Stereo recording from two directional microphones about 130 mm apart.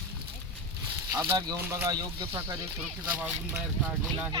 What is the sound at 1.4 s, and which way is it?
Speech, 25° right (ahead or behind).